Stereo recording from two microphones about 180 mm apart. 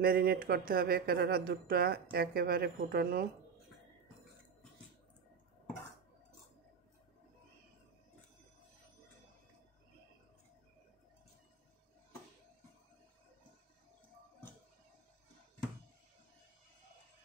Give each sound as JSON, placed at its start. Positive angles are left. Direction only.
{"t": 0.0, "sound": "speech", "side_deg": -55}